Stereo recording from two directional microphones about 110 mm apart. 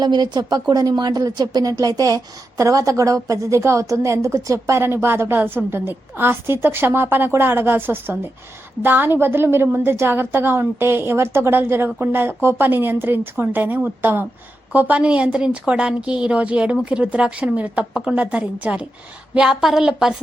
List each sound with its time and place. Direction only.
0.0 s a woman's voice: 40° right (ahead or behind); by 20.1 s 5° right (ahead or behind)